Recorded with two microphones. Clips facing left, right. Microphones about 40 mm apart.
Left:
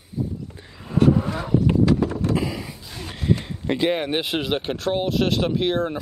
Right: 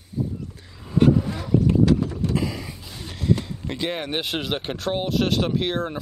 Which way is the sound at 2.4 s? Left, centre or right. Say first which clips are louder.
Left 1 dB; centre.